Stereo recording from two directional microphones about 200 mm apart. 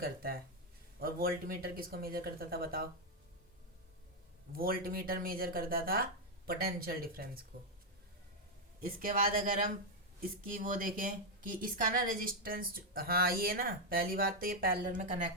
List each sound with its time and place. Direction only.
0.0 s a woman's voice: 50° right (ahead or behind)
4.5 s a woman's voice: 50° right (ahead or behind)
9.0 s a woman's voice: 45° right (ahead or behind)